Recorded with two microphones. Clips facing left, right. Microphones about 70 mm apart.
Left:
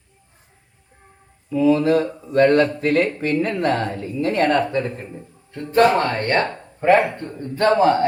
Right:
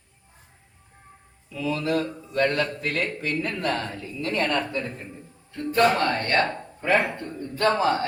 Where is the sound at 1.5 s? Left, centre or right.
Left.